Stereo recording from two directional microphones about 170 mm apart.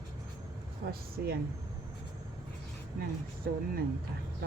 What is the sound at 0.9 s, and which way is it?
Speech, 65° right (ahead or behind).